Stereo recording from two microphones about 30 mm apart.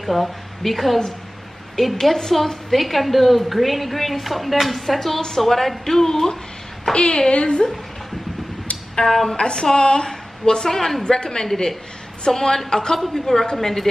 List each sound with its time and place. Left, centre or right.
0.0 s a woman's voice: centre
2.0 s a woman's voice: centre
6.8 s a woman's voice: left
9.1 s speech: centre
9.4 s a woman's voice: left; by 11.1 s centre
11.1 s a woman's voice: left